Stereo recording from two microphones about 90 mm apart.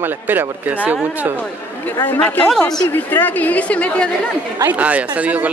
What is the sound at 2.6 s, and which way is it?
Speech, 45° left (ahead or behind).